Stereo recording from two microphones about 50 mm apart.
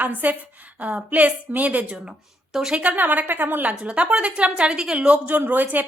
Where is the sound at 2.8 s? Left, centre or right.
Right.